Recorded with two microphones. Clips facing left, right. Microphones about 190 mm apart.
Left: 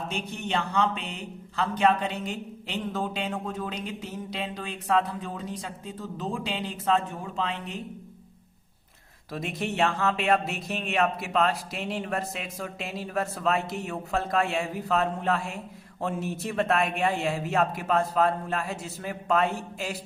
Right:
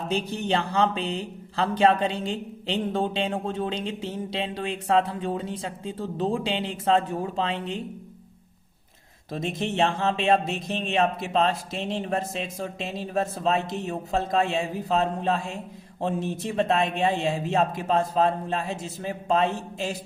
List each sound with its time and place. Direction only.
0.1 s speech: 35° right (ahead or behind)
9.3 s speech: 25° right (ahead or behind)